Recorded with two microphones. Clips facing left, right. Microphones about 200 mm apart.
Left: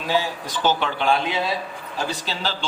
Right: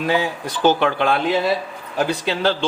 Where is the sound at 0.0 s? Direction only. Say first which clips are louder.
Right 3 dB; 60° right (ahead or behind).